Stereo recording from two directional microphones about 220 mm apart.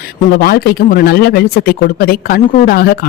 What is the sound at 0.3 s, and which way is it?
Speech, 45° left (ahead or behind).